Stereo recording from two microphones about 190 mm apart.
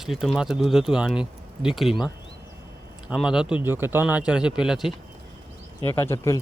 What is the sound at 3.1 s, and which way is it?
Speech, 5° right (ahead or behind).